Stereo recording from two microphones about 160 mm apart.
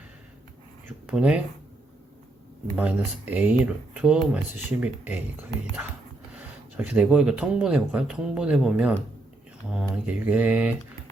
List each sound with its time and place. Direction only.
0.9 s speech: 5° right (ahead or behind)
2.7 s speech: 10° right (ahead or behind)
6.7 s speech: 10° right (ahead or behind)